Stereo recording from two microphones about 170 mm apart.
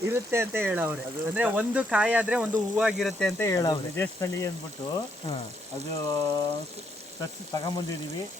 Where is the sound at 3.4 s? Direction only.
20° left (ahead or behind).